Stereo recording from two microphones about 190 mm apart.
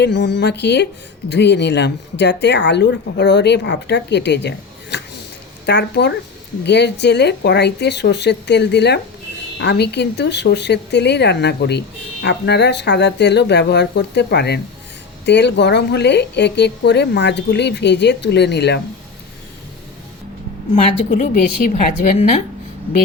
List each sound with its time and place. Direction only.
0.0 s speech: 65° left (ahead or behind)
21.1 s a woman's voice: 45° left (ahead or behind)